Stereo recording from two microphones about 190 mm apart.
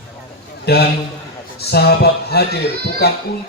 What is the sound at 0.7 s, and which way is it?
Speech, 55° left (ahead or behind).